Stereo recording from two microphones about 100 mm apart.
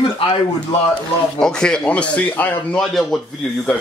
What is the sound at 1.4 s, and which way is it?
Speech, 10° left (ahead or behind).